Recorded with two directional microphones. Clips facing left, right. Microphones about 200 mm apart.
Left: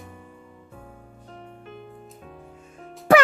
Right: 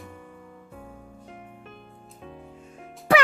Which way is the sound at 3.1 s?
50° left (ahead or behind).